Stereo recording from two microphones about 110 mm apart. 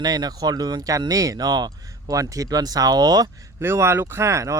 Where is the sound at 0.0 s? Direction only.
35° right (ahead or behind).